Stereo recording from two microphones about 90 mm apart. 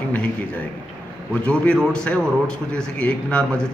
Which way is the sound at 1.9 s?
10° left (ahead or behind).